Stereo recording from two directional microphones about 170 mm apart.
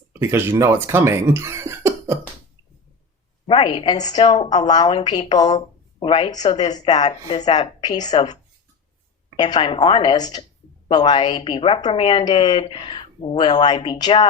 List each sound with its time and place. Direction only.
0.1 s speech: 15° right (ahead or behind)
3.4 s a woman's voice: 30° left (ahead or behind)
4.6 s a woman's voice: 25° left (ahead or behind)